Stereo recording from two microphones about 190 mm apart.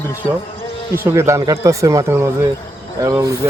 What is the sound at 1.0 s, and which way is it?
Speech, 15° right (ahead or behind).